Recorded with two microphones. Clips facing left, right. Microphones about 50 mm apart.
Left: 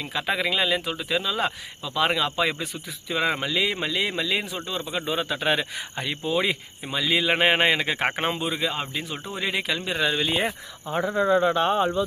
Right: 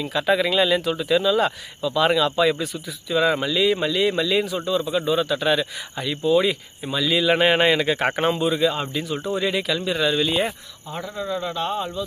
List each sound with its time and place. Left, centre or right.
0.0 s speech: centre
9.1 s speech: centre